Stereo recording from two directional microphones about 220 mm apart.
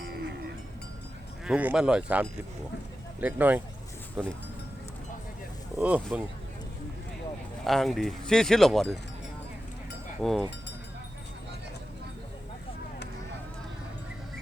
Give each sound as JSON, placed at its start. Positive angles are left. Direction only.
{"t": 1.5, "sound": "speech", "side_deg": -5}
{"t": 5.7, "sound": "speech", "side_deg": -5}
{"t": 7.6, "sound": "speech", "side_deg": 0}
{"t": 10.2, "sound": "speech", "side_deg": 0}